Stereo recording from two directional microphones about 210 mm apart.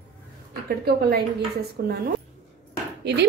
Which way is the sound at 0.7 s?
50° right (ahead or behind).